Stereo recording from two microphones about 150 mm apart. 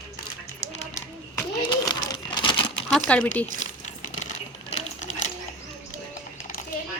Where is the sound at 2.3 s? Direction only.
35° left (ahead or behind).